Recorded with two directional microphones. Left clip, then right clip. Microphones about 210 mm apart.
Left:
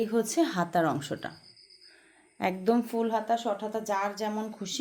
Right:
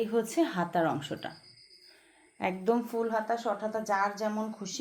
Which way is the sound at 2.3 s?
35° left (ahead or behind).